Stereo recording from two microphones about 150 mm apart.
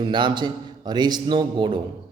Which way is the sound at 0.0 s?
30° right (ahead or behind).